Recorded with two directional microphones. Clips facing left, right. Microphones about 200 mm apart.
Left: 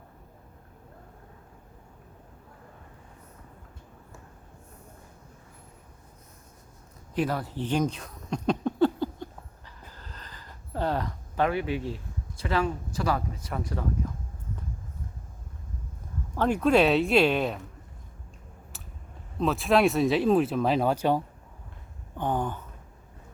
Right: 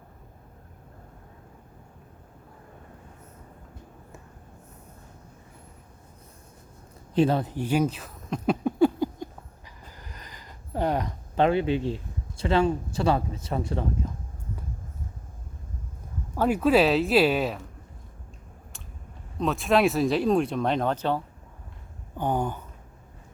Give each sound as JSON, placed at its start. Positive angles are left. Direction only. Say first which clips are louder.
{"t": 7.1, "sound": "speech", "louder": "right 6 dB", "side_deg": -25}
{"t": 7.5, "sound": "a sound", "louder": "right 2 dB", "side_deg": -10}
{"t": 12.4, "sound": "speech", "louder": "right 5 dB", "side_deg": -25}
{"t": 16.3, "sound": "speech", "louder": "right 1 dB", "side_deg": -10}
{"t": 19.4, "sound": "speech", "louder": "even", "side_deg": 0}
{"t": 22.2, "sound": "a sound", "louder": "right 2 dB", "side_deg": -10}